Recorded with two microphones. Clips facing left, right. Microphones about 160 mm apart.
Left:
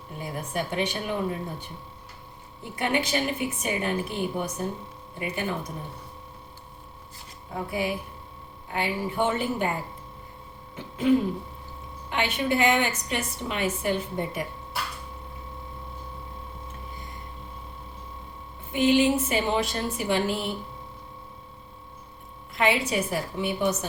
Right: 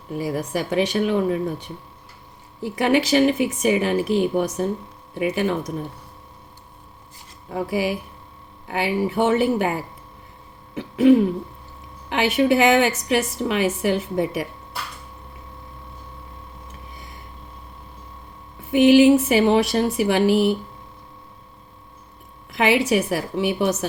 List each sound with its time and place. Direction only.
0.2 s a woman's voice: 85° right
2.7 s a woman's voice: 90° right
7.5 s a woman's voice: 90° right
10.8 s throat clearing: 75° right (ahead or behind)
12.0 s a woman's voice: 85° right
18.7 s speech: 85° right
22.5 s speech: 85° right